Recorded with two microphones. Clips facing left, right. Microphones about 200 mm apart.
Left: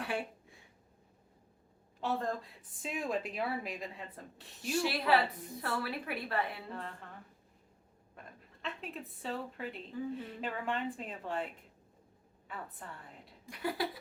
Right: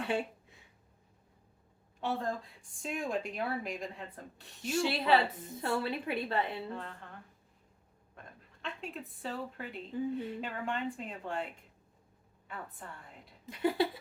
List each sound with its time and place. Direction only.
0.0 s speech: 25° right (ahead or behind)
2.0 s a woman's voice: centre (ahead or behind)
4.8 s a woman's voice: 25° right (ahead or behind)
8.6 s a woman's voice: centre (ahead or behind)
12.5 s a woman's voice: centre (ahead or behind)
13.4 s a sound: 25° right (ahead or behind)